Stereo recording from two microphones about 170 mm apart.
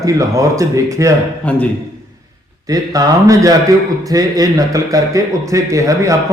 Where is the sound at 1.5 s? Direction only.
10° left (ahead or behind).